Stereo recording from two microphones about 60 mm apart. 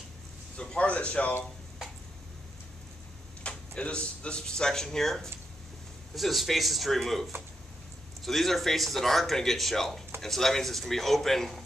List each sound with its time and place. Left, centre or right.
0.6 s a man's voice: centre
3.4 s speech: centre